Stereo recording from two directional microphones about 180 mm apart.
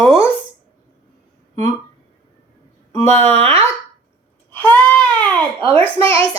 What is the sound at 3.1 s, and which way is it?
Speech, 35° right (ahead or behind).